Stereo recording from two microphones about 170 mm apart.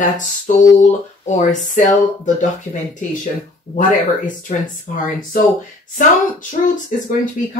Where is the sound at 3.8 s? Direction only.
50° left (ahead or behind).